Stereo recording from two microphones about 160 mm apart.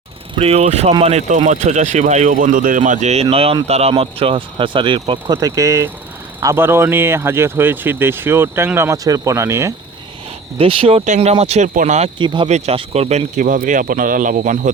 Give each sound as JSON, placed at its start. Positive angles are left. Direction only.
{"t": 0.3, "sound": "speech", "side_deg": -40}
{"t": 10.6, "sound": "speech", "side_deg": -35}
{"t": 11.0, "sound": "speech", "side_deg": -45}
{"t": 12.2, "sound": "speech", "side_deg": -30}
{"t": 12.5, "sound": "speech", "side_deg": -45}